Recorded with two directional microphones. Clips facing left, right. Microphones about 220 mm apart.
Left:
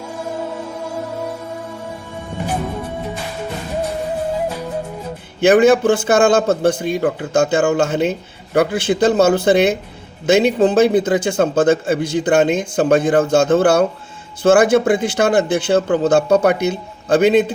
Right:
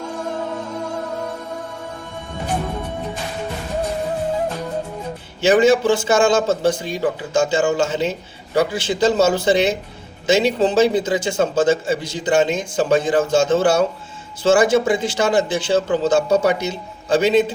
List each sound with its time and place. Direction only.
0.0 s music: 10° left (ahead or behind)
5.4 s speech: 55° left (ahead or behind)